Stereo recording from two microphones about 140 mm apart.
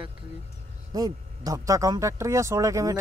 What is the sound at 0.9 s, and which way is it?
Speech, 25° right (ahead or behind).